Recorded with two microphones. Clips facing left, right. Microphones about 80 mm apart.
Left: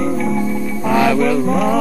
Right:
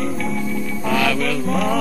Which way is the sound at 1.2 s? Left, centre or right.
Centre.